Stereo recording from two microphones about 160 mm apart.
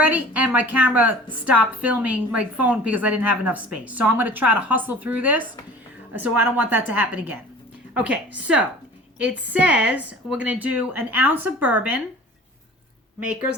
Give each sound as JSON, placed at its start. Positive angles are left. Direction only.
{"t": 0.0, "sound": "a woman's voice", "side_deg": -10}